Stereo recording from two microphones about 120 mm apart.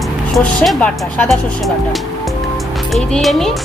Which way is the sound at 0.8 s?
10° left (ahead or behind).